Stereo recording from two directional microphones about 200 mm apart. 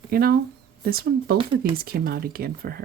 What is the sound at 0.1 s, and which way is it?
Speech, 50° right (ahead or behind).